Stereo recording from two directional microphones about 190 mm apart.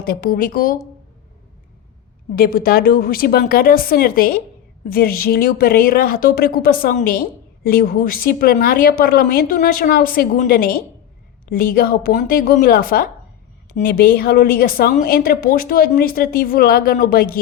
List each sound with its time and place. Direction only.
0.0 s a woman's voice: 50° left (ahead or behind)
2.3 s a woman's voice: 50° left (ahead or behind)